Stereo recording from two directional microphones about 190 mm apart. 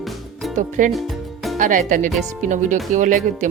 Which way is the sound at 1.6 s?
45° right (ahead or behind).